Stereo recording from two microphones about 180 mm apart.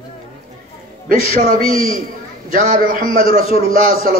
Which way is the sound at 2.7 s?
50° right (ahead or behind).